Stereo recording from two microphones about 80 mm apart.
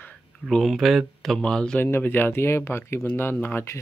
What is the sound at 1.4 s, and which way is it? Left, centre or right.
Speech, centre.